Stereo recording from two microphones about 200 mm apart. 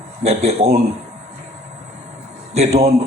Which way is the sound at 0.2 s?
30° right (ahead or behind).